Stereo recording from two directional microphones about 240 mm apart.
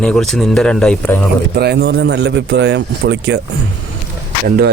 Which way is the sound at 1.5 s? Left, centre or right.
Right.